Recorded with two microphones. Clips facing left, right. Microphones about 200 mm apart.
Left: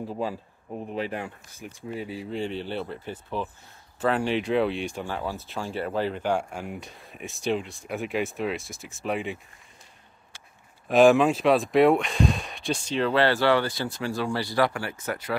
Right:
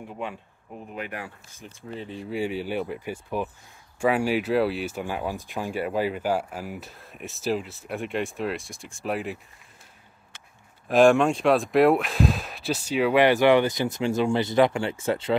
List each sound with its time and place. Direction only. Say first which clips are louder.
0.0 s speech: left 4 dB; 30° left (ahead or behind)
1.9 s speech: left 2 dB; 10° left (ahead or behind)
2.2 s speech: right 5 dB; 10° right (ahead or behind)
10.9 s speech: even; centre (ahead or behind); by 15.3 s 25° right (ahead or behind)